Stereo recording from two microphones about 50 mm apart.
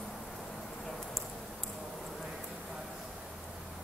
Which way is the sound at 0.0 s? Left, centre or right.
Centre.